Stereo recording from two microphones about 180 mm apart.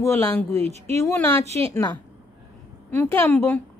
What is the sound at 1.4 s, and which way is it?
Speech, 35° right (ahead or behind).